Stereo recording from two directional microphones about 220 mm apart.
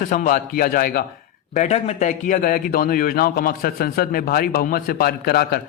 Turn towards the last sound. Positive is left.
turn(degrees=45)  # may be behind; listen again after turning